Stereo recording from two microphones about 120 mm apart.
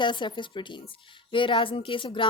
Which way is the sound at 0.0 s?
40° left (ahead or behind).